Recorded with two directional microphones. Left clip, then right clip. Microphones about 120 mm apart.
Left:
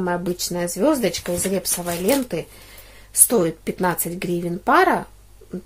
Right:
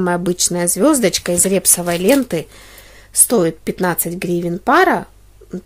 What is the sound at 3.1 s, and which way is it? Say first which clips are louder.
Speech: right 4 dB; 40° right (ahead or behind).